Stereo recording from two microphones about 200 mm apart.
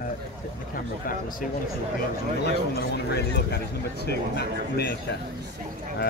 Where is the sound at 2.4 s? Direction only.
55° left (ahead or behind).